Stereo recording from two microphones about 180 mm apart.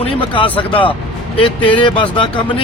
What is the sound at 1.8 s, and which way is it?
Speech, 30° left (ahead or behind).